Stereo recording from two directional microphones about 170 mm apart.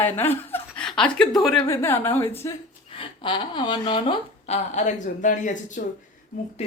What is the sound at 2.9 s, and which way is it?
Speech, 30° left (ahead or behind).